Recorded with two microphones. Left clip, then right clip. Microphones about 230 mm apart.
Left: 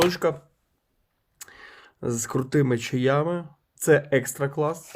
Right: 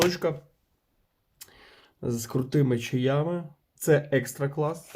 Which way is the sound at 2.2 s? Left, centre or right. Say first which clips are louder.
Left 3 dB; left.